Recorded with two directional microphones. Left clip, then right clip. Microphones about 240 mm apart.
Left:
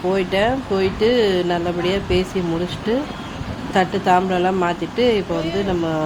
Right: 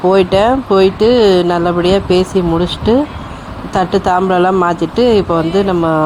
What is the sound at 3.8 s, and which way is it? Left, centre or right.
Speech, right.